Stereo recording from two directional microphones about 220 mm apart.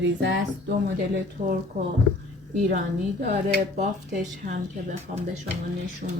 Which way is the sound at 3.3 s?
30° right (ahead or behind).